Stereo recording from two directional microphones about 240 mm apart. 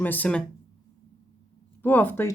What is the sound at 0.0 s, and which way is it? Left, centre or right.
Speech, centre.